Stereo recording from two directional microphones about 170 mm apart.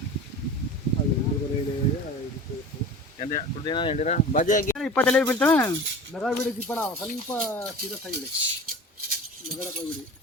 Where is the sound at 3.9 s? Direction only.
45° left (ahead or behind).